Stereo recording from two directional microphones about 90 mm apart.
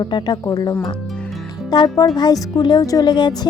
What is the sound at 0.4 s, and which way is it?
Speech, 40° left (ahead or behind).